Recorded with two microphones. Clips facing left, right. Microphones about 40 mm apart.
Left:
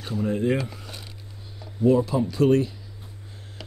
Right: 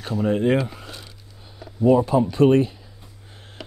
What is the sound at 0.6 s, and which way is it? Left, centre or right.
Speech, right.